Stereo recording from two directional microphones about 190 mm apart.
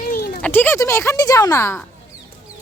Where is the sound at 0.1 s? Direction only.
50° left (ahead or behind).